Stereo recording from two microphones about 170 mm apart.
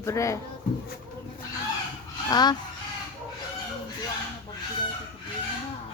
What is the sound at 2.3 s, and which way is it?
Speech, 25° left (ahead or behind).